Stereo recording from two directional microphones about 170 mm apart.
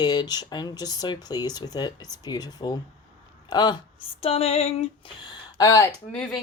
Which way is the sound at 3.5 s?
25° left (ahead or behind).